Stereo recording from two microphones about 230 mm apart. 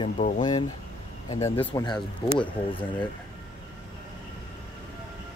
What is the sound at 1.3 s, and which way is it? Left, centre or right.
Speech, centre.